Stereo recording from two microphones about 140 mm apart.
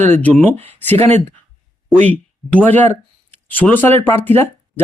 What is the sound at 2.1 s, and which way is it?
A man's voice, 10° left (ahead or behind).